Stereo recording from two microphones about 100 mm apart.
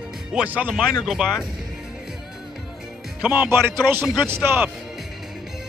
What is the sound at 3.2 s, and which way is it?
Speech, 20° right (ahead or behind).